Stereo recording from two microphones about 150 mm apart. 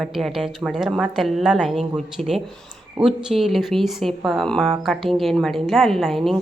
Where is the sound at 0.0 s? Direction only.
Centre (ahead or behind).